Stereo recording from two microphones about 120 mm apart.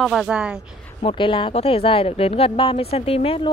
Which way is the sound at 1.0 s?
45° left (ahead or behind).